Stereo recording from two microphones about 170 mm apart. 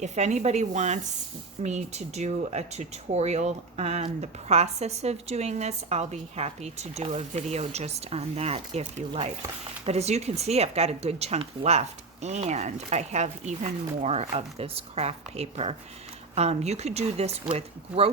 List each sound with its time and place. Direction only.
0.0 s speech: 45° right (ahead or behind)